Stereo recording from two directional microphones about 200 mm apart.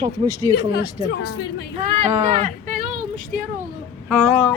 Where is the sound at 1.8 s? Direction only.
35° right (ahead or behind).